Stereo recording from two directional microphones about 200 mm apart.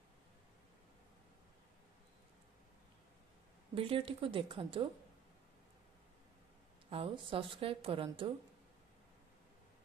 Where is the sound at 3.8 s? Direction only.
25° right (ahead or behind).